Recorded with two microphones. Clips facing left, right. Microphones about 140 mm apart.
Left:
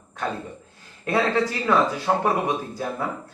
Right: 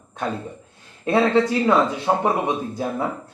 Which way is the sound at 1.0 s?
20° right (ahead or behind).